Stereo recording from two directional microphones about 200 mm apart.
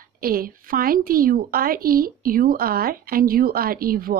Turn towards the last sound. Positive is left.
turn(degrees=-45)  # may be behind; listen again after turning